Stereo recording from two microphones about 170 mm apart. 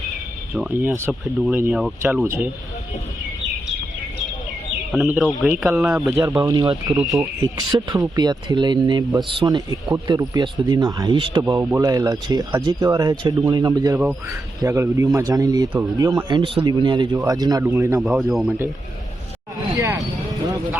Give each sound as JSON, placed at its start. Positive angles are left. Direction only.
{"t": 0.5, "sound": "speech", "side_deg": -10}
{"t": 5.4, "sound": "speech", "side_deg": -5}
{"t": 6.1, "sound": "speech", "side_deg": -15}
{"t": 11.4, "sound": "speech", "side_deg": -15}
{"t": 18.0, "sound": "speech", "side_deg": 0}
{"t": 19.7, "sound": "a sound", "side_deg": -15}